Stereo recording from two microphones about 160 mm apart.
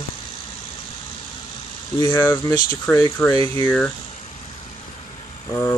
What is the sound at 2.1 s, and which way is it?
Speech, 15° left (ahead or behind).